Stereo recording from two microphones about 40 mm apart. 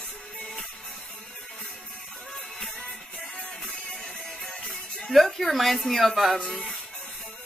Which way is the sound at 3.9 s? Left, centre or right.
Centre.